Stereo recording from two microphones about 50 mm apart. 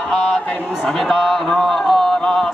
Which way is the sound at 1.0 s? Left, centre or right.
Centre.